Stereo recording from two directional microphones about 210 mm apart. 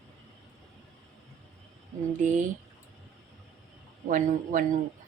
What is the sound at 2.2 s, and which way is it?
Speech, 35° right (ahead or behind).